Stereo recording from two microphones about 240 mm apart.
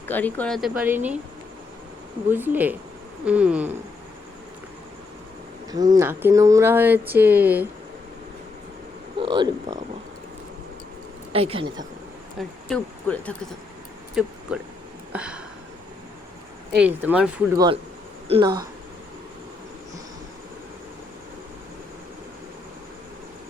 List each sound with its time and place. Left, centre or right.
0.1 s speech: centre
2.3 s speech: centre
6.0 s speech: centre
9.1 s speech: centre
11.3 s speech: right
12.4 s speech: centre
14.5 s speech: centre
15.1 s a sound: centre
16.7 s speech: centre
18.3 s speech: right